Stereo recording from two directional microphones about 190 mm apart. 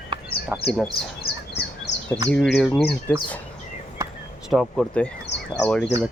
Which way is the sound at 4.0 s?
15° right (ahead or behind).